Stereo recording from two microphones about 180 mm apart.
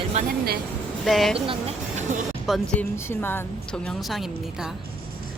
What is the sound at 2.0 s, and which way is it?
Music, 45° right (ahead or behind).